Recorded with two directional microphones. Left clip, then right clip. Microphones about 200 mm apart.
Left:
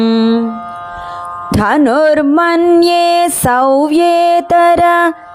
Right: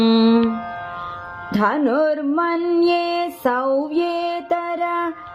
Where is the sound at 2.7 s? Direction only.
55° left (ahead or behind).